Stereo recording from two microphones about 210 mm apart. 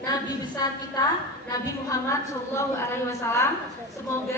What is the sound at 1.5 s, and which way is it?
A woman's voice, 15° left (ahead or behind).